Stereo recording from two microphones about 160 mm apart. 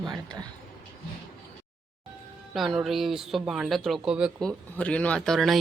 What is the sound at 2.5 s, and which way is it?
Speech, centre (ahead or behind).